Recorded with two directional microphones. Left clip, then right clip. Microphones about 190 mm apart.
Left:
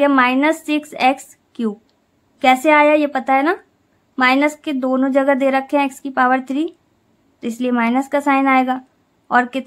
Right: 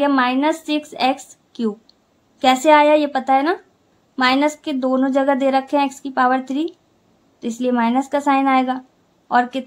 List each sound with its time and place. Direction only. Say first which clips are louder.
0.0 s a woman's voice: left 3 dB; 20° left (ahead or behind)